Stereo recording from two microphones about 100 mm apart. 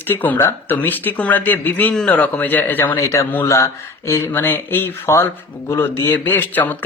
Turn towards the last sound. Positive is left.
turn(degrees=20)  # may be behind; listen again after turning